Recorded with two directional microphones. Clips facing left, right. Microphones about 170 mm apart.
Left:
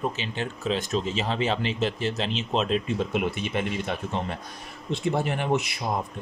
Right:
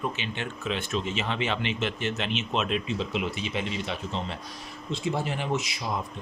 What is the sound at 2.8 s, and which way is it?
Speech, 50° left (ahead or behind).